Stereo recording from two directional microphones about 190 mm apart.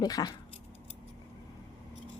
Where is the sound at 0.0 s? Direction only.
20° left (ahead or behind).